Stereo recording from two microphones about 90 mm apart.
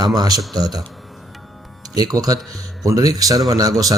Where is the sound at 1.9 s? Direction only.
45° right (ahead or behind).